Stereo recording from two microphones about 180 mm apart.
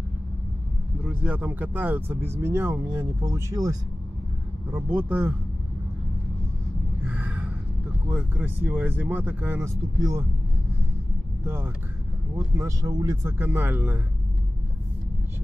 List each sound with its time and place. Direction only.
1.0 s speech: 10° right (ahead or behind)
4.7 s speech: 10° right (ahead or behind)
7.1 s a sound: 10° right (ahead or behind)
8.1 s speech: 10° right (ahead or behind)
11.4 s speech: 15° right (ahead or behind)